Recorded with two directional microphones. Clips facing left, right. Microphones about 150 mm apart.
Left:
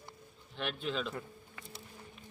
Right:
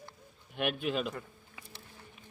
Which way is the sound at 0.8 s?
10° right (ahead or behind).